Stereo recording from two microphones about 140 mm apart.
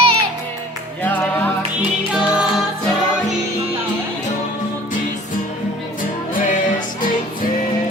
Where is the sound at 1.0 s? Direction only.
10° left (ahead or behind).